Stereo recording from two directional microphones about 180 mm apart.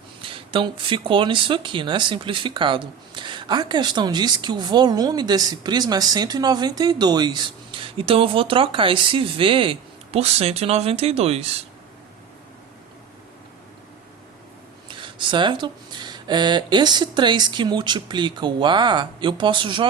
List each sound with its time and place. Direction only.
0.2 s speech: 30° right (ahead or behind)
14.8 s speech: 25° right (ahead or behind)